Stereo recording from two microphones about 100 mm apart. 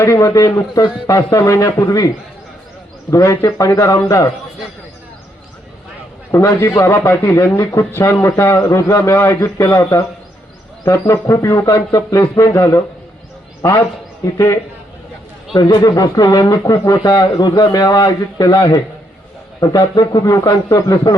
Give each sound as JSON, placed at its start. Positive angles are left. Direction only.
{"t": 0.0, "sound": "speech", "side_deg": 30}
{"t": 6.3, "sound": "a man's voice", "side_deg": 25}